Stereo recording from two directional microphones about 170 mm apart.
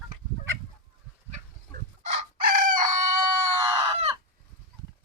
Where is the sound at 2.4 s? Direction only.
55° right (ahead or behind).